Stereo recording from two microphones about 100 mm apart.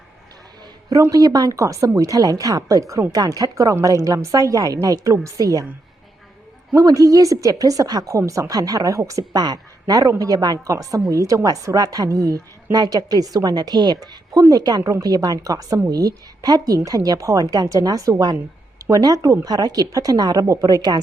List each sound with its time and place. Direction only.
1.1 s a woman's voice: 40° right (ahead or behind)
6.7 s a woman's voice: 35° right (ahead or behind)